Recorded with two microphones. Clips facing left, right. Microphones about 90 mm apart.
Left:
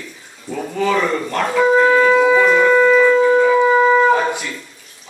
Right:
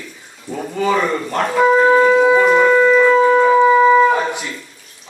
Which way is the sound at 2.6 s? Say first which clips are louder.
Even; 10° right (ahead or behind).